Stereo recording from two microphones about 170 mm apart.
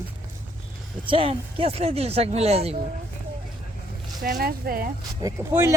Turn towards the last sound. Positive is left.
turn(degrees=-15)  # may be behind; listen again after turning